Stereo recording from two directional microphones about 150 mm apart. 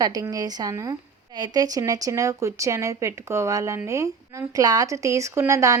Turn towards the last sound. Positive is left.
turn(degrees=-20)  # may be behind; listen again after turning